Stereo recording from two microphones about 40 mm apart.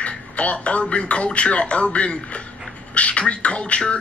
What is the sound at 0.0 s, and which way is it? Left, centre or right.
A man's voice, left.